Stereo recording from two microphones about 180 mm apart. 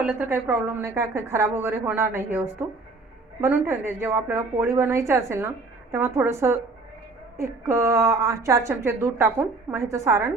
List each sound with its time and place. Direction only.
0.0 s a woman's voice: 10° right (ahead or behind)